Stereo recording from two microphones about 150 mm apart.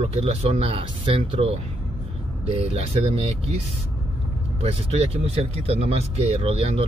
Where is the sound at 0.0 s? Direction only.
45° right (ahead or behind).